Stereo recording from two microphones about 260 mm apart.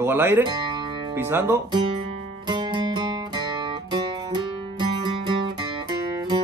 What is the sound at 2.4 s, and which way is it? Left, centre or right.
Music, centre.